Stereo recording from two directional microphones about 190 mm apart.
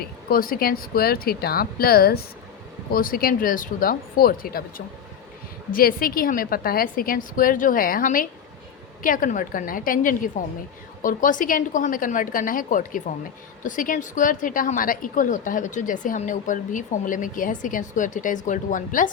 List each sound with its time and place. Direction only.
0.0 s a woman's voice: 50° left (ahead or behind)
5.7 s a woman's voice: 50° left (ahead or behind)